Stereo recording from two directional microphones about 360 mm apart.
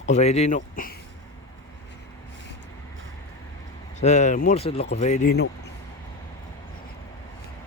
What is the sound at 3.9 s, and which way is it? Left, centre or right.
Speech, centre.